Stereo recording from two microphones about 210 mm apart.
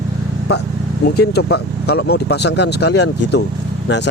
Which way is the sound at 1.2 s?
50° left (ahead or behind).